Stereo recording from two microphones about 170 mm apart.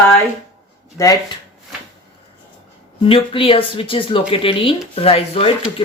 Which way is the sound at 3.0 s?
30° left (ahead or behind).